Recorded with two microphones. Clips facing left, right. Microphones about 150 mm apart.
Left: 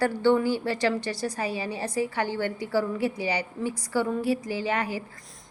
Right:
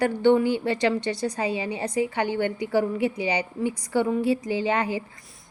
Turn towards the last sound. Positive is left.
turn(degrees=-20)  # may be behind; listen again after turning